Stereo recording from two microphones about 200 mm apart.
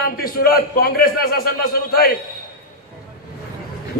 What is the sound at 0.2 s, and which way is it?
A man's voice, 50° left (ahead or behind).